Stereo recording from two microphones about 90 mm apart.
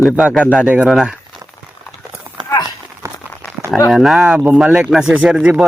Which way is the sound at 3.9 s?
5° right (ahead or behind).